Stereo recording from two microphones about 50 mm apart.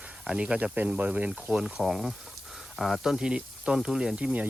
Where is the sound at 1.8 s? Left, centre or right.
Centre.